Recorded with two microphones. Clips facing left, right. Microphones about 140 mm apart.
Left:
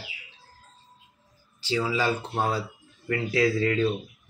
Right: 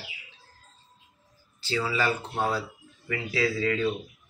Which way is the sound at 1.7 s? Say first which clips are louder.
Left 2 dB; 10° left (ahead or behind).